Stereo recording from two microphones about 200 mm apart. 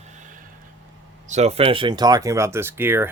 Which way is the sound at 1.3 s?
35° right (ahead or behind).